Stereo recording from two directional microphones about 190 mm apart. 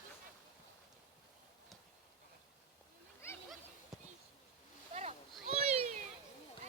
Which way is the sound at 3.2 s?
10° left (ahead or behind).